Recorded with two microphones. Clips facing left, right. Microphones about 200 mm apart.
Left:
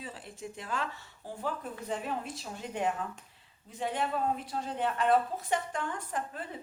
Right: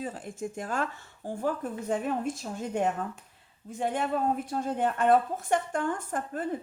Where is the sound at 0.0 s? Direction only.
50° right (ahead or behind).